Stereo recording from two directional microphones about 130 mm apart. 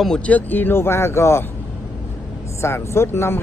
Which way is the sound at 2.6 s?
20° left (ahead or behind).